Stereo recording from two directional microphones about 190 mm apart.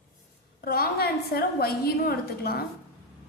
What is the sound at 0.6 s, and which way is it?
A woman's voice, 55° left (ahead or behind).